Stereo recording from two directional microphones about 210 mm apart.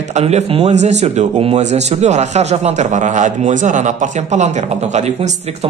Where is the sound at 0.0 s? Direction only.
35° right (ahead or behind).